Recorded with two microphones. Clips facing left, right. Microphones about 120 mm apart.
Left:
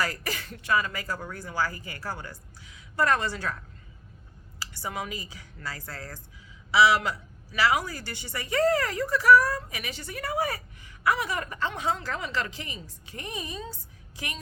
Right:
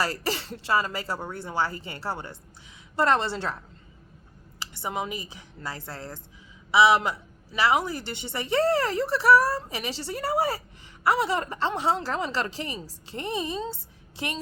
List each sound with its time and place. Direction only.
0.0 s speech: 30° right (ahead or behind)
4.6 s a woman's voice: 20° right (ahead or behind)